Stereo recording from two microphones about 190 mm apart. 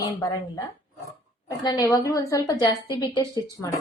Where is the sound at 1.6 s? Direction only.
20° left (ahead or behind).